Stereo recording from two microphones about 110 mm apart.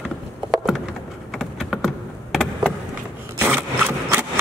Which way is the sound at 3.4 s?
20° right (ahead or behind).